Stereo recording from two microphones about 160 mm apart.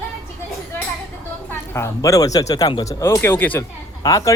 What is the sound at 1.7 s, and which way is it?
Speech, 20° left (ahead or behind).